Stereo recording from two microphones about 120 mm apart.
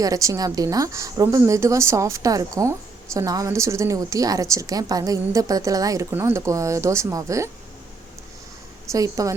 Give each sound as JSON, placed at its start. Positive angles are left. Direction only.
{"t": 0.0, "sound": "a woman's voice", "side_deg": -25}
{"t": 8.9, "sound": "a woman's voice", "side_deg": -30}